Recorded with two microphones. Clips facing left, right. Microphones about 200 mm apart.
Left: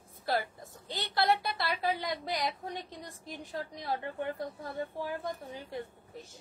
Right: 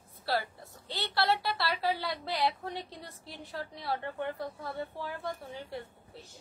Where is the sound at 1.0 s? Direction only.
20° left (ahead or behind).